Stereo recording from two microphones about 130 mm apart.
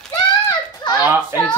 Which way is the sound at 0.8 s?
30° left (ahead or behind).